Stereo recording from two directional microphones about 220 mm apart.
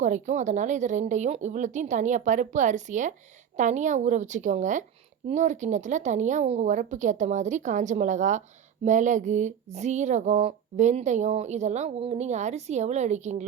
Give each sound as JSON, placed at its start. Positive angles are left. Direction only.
{"t": 0.0, "sound": "speech", "side_deg": -35}